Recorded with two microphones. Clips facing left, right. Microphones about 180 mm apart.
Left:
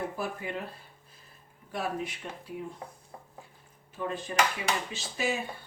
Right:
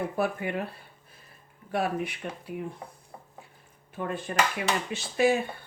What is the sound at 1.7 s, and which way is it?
Speech, 65° right (ahead or behind).